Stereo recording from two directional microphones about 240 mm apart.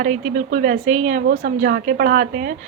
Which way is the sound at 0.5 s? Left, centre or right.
Right.